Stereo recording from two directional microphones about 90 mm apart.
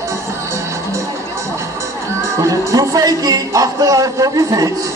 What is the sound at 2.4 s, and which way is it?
Speech, 40° right (ahead or behind).